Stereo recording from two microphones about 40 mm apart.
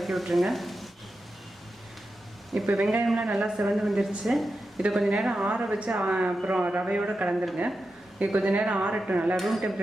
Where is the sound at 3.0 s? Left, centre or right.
Right.